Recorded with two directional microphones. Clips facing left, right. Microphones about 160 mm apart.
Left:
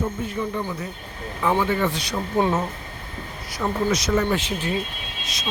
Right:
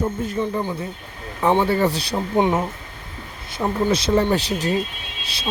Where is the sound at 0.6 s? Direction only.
25° right (ahead or behind).